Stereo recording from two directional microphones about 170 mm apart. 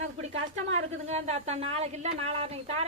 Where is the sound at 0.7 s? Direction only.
40° right (ahead or behind).